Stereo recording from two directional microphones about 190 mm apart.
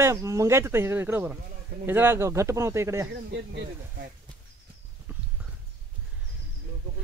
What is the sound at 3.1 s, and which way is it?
Speech, 65° right (ahead or behind).